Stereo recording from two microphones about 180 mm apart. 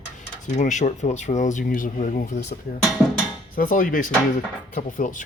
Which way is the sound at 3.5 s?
50° left (ahead or behind).